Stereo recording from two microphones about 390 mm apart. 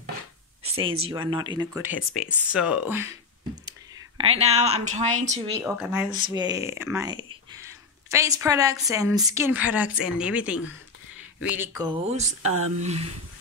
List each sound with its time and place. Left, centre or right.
0.7 s speech: centre
4.2 s speech: centre